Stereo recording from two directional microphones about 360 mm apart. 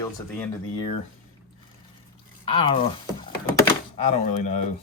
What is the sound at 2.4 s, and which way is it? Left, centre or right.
Speech, centre.